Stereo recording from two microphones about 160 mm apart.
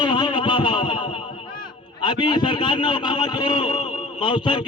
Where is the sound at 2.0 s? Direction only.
30° left (ahead or behind).